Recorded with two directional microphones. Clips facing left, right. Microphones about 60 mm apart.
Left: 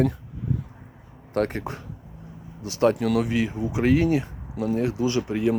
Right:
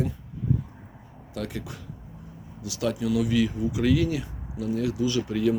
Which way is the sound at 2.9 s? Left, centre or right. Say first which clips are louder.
Left 3 dB; left.